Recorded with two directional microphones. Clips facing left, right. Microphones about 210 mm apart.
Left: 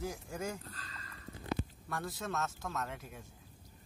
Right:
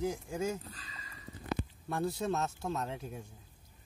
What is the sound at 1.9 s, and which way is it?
Speech, 30° right (ahead or behind).